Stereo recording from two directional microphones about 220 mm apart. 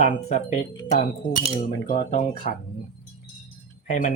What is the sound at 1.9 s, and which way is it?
Speech, 30° left (ahead or behind).